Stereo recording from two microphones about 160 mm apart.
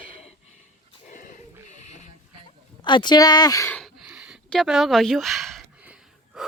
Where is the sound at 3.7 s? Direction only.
Centre (ahead or behind).